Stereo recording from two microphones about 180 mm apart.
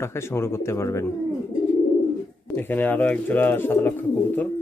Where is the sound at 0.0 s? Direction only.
15° left (ahead or behind).